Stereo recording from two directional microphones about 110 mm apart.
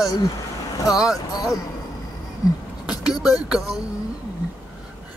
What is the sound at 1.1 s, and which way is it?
Speech, 35° left (ahead or behind).